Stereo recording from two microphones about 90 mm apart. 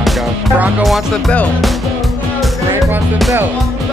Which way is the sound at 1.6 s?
Centre (ahead or behind).